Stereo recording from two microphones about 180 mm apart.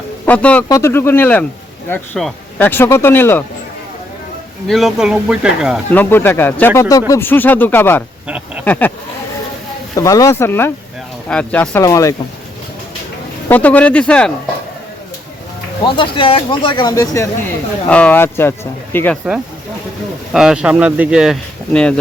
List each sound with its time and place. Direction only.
0.3 s speech: 5° left (ahead or behind)
4.7 s speech: centre (ahead or behind)
5.9 s speech: 10° left (ahead or behind)
9.9 s speech: 20° left (ahead or behind)
13.5 s speech: 10° left (ahead or behind)
15.8 s speech: 25° left (ahead or behind)
17.8 s speech: 5° left (ahead or behind)
20.3 s speech: 5° right (ahead or behind)
21.7 s speech: 5° left (ahead or behind)